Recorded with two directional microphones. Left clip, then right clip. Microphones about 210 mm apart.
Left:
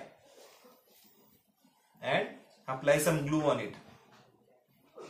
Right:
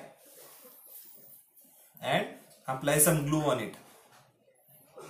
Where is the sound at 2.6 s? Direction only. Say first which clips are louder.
Even; 15° left (ahead or behind).